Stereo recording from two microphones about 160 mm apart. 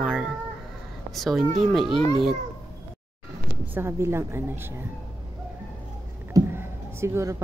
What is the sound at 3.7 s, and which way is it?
A woman's voice, 15° right (ahead or behind).